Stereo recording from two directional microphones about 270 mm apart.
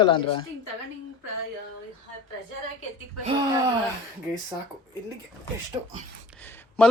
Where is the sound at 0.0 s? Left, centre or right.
Centre.